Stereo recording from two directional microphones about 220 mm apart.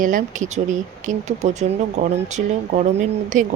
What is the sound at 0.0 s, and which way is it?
Speech, 35° right (ahead or behind).